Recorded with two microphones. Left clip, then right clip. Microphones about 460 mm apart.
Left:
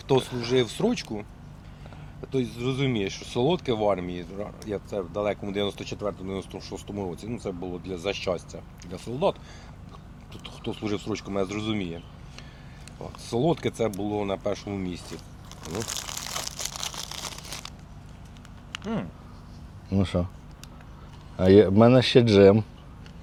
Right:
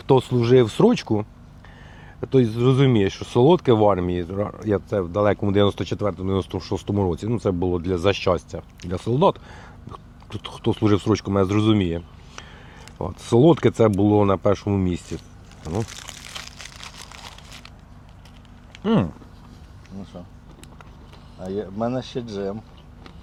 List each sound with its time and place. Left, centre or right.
0.1 s speech: right
13.0 s speech: right
21.4 s speech: left